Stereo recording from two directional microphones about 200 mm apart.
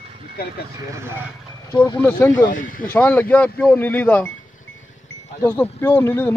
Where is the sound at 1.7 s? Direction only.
10° left (ahead or behind).